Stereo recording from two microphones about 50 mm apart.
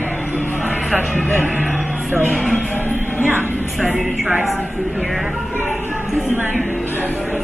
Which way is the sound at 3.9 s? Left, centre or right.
Right.